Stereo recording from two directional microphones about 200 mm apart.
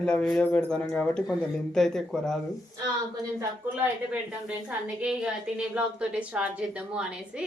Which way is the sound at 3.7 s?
5° right (ahead or behind).